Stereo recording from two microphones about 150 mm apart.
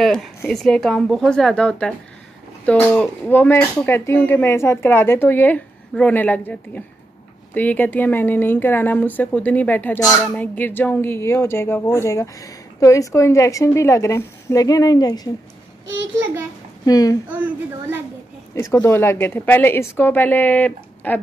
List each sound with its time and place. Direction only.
0.0 s speech: centre (ahead or behind); by 15.3 s 25° left (ahead or behind)
16.8 s speech: 25° left (ahead or behind)
17.3 s speech: 10° right (ahead or behind)
18.5 s speech: 15° left (ahead or behind)